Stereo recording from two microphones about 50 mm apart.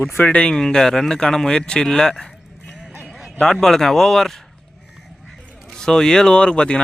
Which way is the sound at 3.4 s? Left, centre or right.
Centre.